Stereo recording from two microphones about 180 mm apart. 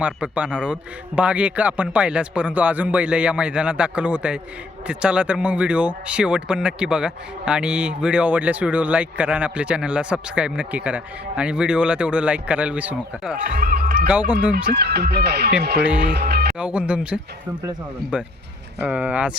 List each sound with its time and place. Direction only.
0.0 s a man's voice: 5° right (ahead or behind)
13.6 s basketball bounce: 55° right (ahead or behind)
14.1 s a man's voice: 10° right (ahead or behind)
14.5 s speech: 65° right (ahead or behind)
15.8 s a man's voice: 5° right (ahead or behind)
16.1 s music: 60° right (ahead or behind)
16.6 s a man's voice: 5° right (ahead or behind)
18.8 s a man's voice: 10° right (ahead or behind)